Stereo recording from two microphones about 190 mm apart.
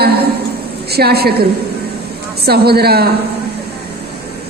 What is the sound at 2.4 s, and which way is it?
Speech, 55° right (ahead or behind).